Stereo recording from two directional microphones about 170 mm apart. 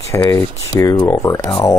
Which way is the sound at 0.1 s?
15° left (ahead or behind).